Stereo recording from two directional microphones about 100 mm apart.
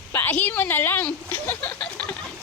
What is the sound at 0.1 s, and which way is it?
Speech, 20° left (ahead or behind).